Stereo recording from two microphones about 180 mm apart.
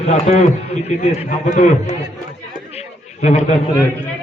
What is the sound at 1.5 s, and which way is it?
Speech, 40° left (ahead or behind).